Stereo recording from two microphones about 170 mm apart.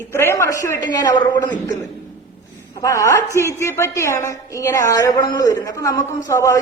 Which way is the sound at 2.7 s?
20° left (ahead or behind).